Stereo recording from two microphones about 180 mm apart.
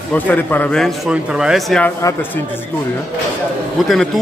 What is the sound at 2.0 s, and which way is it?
Speech, 15° left (ahead or behind).